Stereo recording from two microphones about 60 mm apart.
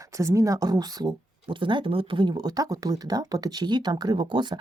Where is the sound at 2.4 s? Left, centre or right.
Right.